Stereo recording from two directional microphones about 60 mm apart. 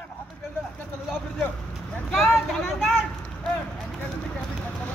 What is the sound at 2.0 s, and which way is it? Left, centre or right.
Speech, centre.